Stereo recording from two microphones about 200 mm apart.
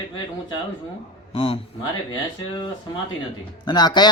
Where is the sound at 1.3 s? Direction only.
30° left (ahead or behind).